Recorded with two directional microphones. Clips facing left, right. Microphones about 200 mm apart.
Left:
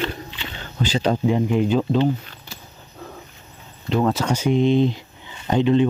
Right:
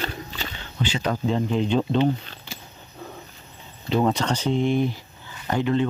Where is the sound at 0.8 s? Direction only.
35° left (ahead or behind).